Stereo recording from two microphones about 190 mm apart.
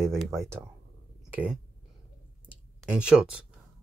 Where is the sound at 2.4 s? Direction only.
5° right (ahead or behind).